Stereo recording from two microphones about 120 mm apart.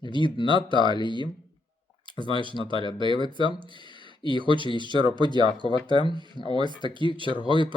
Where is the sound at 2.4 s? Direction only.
45° right (ahead or behind).